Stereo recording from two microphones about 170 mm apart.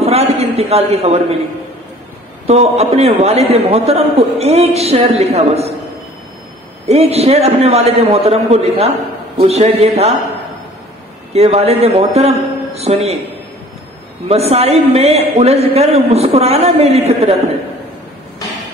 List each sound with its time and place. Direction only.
0.0 s a sound: 35° right (ahead or behind)
2.4 s a man's voice: 40° right (ahead or behind)
6.9 s a man's voice: 35° right (ahead or behind)
11.3 s a man's voice: 35° right (ahead or behind)
14.2 s a man's voice: 35° right (ahead or behind)